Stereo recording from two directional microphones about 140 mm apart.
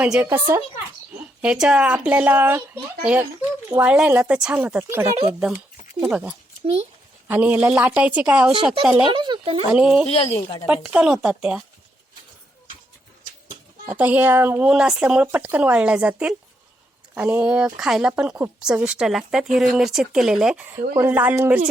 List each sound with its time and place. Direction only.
0.0 s speech: 10° right (ahead or behind)
1.4 s speech: 5° right (ahead or behind)
5.3 s speech: 5° right (ahead or behind)
9.1 s speech: 35° right (ahead or behind)
9.7 s speech: 5° right (ahead or behind)
10.1 s speech: 45° left (ahead or behind)
10.7 s speech: 10° right (ahead or behind)
13.9 s speech: 10° right (ahead or behind)
20.9 s speech: 15° right (ahead or behind)